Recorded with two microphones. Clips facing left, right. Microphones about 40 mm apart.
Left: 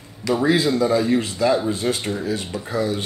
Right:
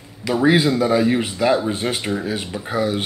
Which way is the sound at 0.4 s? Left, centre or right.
Right.